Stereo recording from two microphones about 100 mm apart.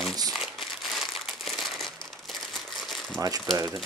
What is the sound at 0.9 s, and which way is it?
Crumpling, centre (ahead or behind).